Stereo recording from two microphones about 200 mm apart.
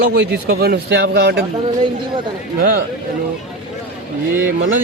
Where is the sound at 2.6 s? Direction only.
45° right (ahead or behind).